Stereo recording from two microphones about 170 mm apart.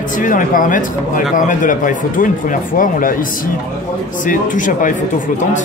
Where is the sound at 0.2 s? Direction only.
50° left (ahead or behind).